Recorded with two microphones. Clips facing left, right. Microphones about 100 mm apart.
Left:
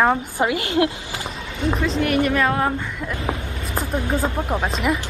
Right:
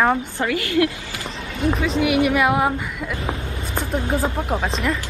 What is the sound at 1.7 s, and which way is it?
Speech, centre (ahead or behind).